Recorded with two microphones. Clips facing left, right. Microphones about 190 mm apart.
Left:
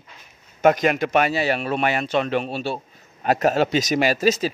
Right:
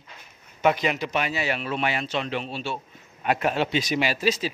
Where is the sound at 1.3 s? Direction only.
35° left (ahead or behind).